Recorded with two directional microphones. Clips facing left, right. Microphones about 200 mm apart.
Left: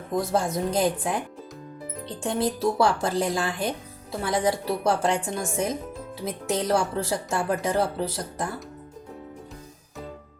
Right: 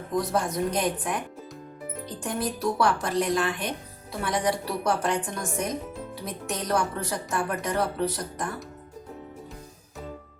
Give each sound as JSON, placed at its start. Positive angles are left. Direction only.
{"t": 0.2, "sound": "a woman's voice", "side_deg": 25}
{"t": 2.2, "sound": "a woman's voice", "side_deg": 25}